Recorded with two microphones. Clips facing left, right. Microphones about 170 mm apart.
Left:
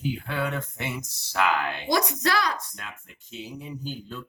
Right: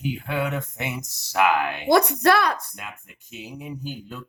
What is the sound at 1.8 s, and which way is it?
Speech, 60° right (ahead or behind).